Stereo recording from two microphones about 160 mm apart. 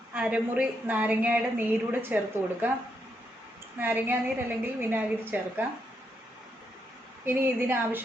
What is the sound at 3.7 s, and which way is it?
A woman's voice, 10° right (ahead or behind).